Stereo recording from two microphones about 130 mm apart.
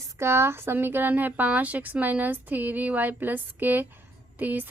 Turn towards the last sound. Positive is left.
turn(degrees=-15)  # may be behind; listen again after turning